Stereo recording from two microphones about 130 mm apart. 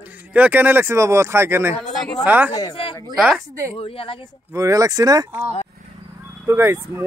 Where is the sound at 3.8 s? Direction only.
45° left (ahead or behind).